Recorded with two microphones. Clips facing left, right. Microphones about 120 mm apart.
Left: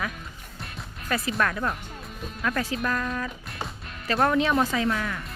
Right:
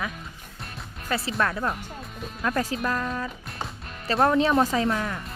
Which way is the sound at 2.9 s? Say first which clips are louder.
Even; 5° right (ahead or behind).